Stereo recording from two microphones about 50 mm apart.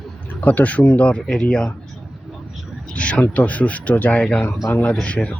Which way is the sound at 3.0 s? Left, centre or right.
Left.